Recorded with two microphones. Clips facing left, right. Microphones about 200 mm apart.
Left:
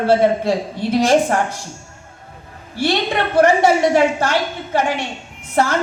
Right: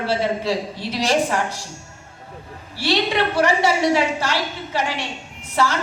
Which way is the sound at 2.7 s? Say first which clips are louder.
Left 2 dB; 50° left (ahead or behind).